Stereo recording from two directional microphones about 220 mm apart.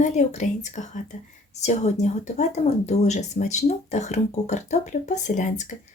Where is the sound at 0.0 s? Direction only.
35° left (ahead or behind).